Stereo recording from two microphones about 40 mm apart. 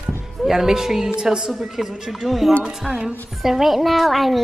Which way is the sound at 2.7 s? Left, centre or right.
Centre.